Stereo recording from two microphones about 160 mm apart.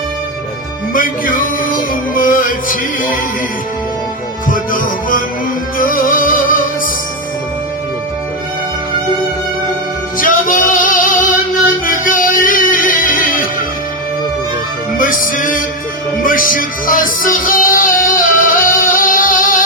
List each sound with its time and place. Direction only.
0.9 s music: 60° left (ahead or behind)
4.4 s music: 60° left (ahead or behind)
10.2 s music: 60° left (ahead or behind)
14.9 s music: 60° left (ahead or behind)